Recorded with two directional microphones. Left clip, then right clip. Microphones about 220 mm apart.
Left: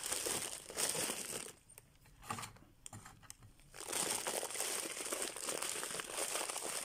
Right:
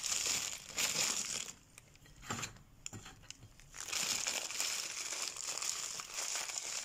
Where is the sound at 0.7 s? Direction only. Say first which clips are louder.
Right 3 dB; 30° left (ahead or behind).